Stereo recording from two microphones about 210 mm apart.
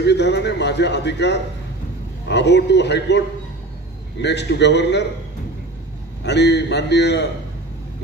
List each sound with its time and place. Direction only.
0.0 s a man's voice: 55° left (ahead or behind)
6.2 s a man's voice: 55° left (ahead or behind)